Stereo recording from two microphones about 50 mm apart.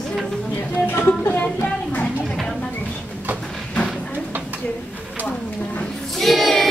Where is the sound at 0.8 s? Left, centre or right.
Left.